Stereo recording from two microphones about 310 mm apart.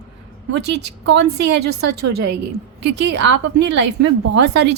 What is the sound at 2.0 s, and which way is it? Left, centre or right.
Speech, right.